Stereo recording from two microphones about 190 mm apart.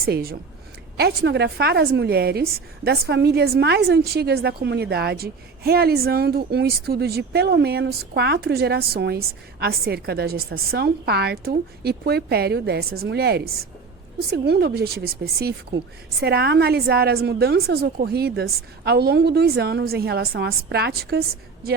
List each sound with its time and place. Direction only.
0.0 s a woman's voice: 50° right (ahead or behind)